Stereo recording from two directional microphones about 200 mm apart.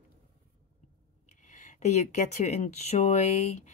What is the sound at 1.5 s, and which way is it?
A woman's voice, 40° left (ahead or behind).